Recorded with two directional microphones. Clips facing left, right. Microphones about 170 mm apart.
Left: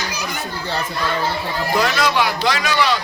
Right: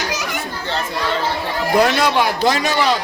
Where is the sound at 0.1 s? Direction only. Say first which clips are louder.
Right 3 dB; 90° right.